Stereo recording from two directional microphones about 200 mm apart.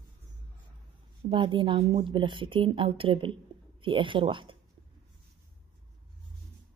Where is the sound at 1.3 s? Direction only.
25° right (ahead or behind).